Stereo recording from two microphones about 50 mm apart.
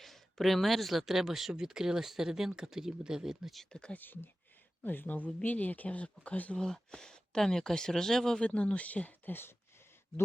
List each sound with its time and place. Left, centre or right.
0.0 s speech: centre
3.7 s speech: centre
3.9 s speech: left
6.6 s speech: centre
8.4 s speech: left
9.3 s speech: left